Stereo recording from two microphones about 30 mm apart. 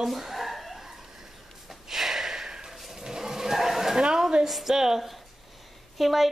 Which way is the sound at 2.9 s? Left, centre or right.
Centre.